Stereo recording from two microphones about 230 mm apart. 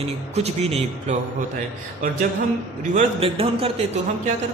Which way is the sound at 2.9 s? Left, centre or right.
Right.